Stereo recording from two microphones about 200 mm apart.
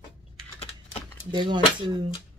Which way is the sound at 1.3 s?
25° right (ahead or behind).